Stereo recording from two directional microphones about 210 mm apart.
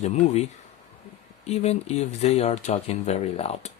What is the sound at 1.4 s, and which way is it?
Speech, 30° left (ahead or behind).